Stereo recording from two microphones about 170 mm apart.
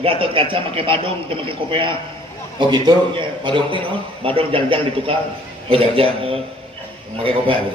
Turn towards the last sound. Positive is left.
turn(degrees=-30)  # may be behind; listen again after turning